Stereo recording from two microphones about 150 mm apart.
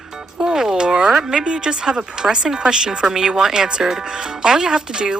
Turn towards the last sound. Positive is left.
turn(degrees=-5)  # may be behind; listen again after turning